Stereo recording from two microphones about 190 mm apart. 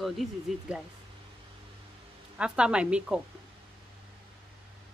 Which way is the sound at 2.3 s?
5° right (ahead or behind).